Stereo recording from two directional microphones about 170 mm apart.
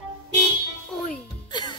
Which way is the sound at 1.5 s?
25° left (ahead or behind).